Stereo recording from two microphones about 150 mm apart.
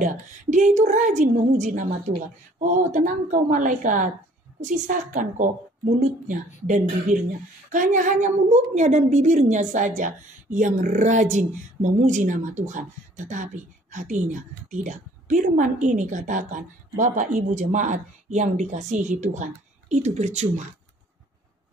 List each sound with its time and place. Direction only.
0.0 s a woman's voice: 55° right (ahead or behind)